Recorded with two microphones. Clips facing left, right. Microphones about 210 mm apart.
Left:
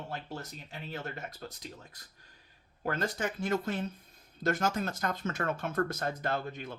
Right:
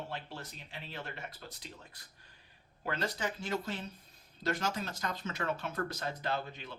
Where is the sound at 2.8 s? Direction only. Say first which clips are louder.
Left 3 dB; 50° left (ahead or behind).